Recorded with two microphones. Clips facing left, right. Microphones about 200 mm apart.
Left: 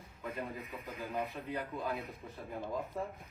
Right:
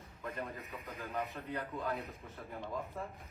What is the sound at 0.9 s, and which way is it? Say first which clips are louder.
Speech: left 2 dB; 15° left (ahead or behind).